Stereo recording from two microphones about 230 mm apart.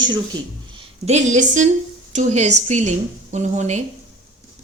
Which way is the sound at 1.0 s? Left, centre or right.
Right.